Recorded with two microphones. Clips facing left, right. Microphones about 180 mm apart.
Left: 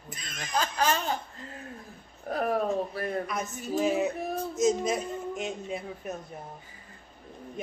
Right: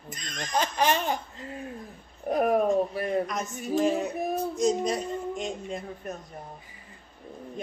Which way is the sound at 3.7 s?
5° left (ahead or behind).